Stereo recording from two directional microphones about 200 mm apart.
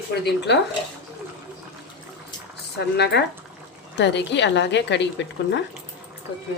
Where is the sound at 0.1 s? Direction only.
55° left (ahead or behind).